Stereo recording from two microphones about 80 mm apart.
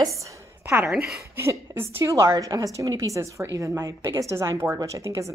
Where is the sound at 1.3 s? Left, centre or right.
Right.